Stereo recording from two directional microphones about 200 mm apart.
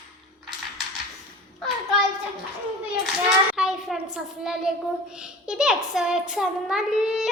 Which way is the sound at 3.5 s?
Centre (ahead or behind).